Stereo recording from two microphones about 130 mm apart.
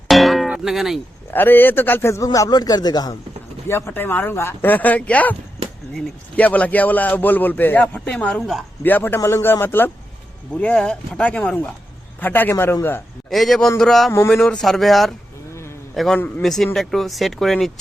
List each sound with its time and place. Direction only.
0.1 s music: centre (ahead or behind)
1.3 s a man's voice: 15° left (ahead or behind); by 3.2 s 30° left (ahead or behind)
3.7 s speech: 20° left (ahead or behind); by 8.6 s centre (ahead or behind)
8.8 s speech: 15° left (ahead or behind)
13.3 s speech: centre (ahead or behind)